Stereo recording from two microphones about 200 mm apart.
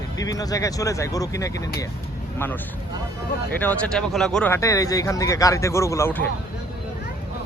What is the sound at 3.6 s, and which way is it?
Speech, 5° left (ahead or behind).